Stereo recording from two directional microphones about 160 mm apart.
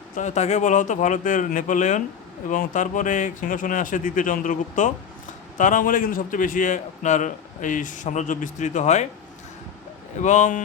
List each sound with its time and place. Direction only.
0.2 s a man's voice: 45° left (ahead or behind)
10.2 s a man's voice: 50° left (ahead or behind)